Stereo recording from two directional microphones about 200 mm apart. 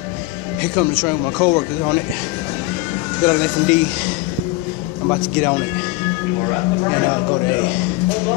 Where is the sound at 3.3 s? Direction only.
5° left (ahead or behind).